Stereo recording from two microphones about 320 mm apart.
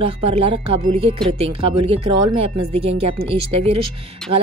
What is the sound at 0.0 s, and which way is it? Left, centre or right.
Speech, centre.